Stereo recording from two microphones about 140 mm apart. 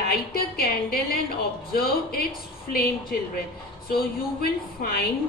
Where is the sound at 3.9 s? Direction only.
90° left.